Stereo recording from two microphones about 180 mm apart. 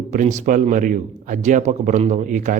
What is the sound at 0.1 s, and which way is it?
Speech, 40° right (ahead or behind).